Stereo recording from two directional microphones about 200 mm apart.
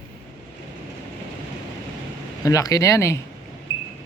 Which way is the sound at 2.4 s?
15° left (ahead or behind).